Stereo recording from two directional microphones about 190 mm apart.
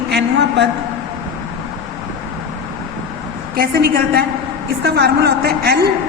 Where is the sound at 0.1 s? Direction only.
65° right (ahead or behind).